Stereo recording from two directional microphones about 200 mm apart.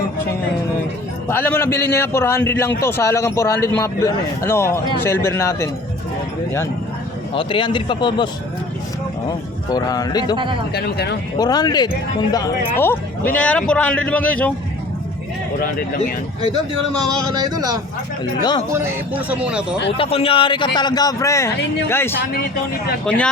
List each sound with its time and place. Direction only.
1.3 s a man's voice: 10° left (ahead or behind)
7.3 s a man's voice: 25° left (ahead or behind)
9.6 s a man's voice: 20° left (ahead or behind)
10.3 s speech: 25° right (ahead or behind)
10.8 s speech: 55° left (ahead or behind)
11.3 s a man's voice: 20° left (ahead or behind)
15.6 s speech: 50° left (ahead or behind)
17.2 s speech: 20° right (ahead or behind)
20.0 s a man's voice: 30° left (ahead or behind); by 23.3 s 5° left (ahead or behind)